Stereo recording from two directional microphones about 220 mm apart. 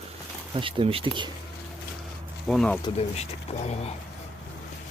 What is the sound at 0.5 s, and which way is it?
Speech, 25° right (ahead or behind).